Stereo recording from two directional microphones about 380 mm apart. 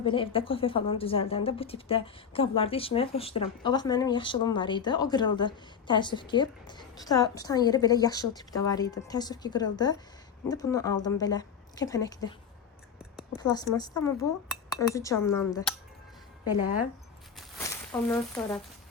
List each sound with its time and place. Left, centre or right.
0.0 s a woman's voice: centre
13.4 s a woman's voice: centre
16.4 s speech: left
17.7 s a sound: centre
18.1 s speech: centre